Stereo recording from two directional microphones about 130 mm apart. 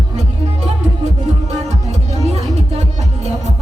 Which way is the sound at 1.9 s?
60° right (ahead or behind).